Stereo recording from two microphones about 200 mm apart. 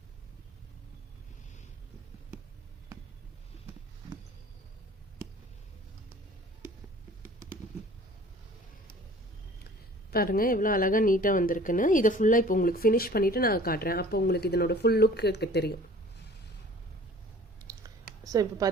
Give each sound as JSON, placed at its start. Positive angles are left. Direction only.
{"t": 7.2, "sound": "typing", "side_deg": -45}
{"t": 10.1, "sound": "a woman's voice", "side_deg": 50}
{"t": 18.3, "sound": "speech", "side_deg": -15}